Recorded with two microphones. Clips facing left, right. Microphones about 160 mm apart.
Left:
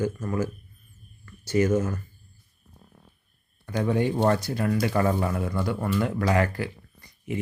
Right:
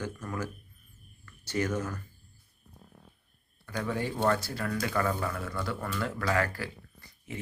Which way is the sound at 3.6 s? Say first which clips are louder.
Left 8 dB; 20° left (ahead or behind).